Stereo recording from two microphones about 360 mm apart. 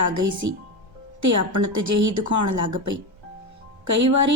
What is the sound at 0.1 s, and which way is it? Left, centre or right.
A woman's voice, right.